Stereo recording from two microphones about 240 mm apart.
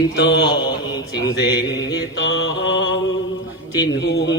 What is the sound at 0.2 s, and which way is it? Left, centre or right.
Mantra, left.